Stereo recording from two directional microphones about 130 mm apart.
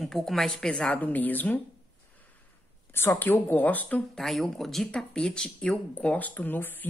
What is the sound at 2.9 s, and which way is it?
Speech, 15° left (ahead or behind).